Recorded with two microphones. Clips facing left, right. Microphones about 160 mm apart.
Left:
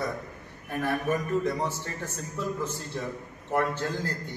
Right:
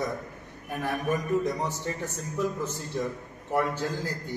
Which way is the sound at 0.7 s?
15° right (ahead or behind).